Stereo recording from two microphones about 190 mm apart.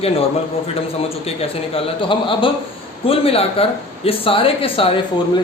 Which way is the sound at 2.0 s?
25° left (ahead or behind).